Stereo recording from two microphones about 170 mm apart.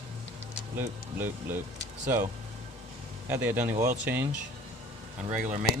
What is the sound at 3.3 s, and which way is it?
Speech, 10° right (ahead or behind).